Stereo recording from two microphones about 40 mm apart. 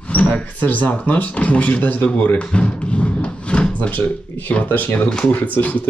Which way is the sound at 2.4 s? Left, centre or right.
Left.